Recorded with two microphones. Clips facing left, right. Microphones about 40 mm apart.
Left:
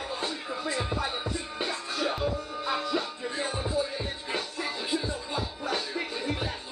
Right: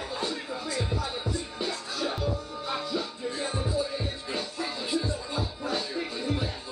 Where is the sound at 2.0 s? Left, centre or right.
Left.